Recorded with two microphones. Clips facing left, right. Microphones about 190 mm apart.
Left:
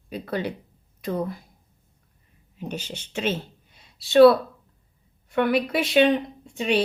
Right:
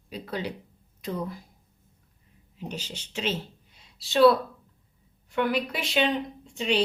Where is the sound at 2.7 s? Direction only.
55° left (ahead or behind).